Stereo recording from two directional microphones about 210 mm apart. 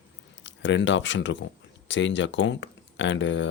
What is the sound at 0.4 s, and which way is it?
Speech, 60° left (ahead or behind).